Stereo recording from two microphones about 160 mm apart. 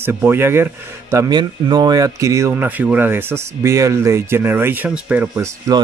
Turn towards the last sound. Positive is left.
turn(degrees=-15)  # may be behind; listen again after turning